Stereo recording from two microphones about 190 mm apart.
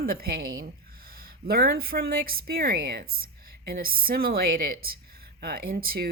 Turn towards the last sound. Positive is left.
turn(degrees=-50)  # may be behind; listen again after turning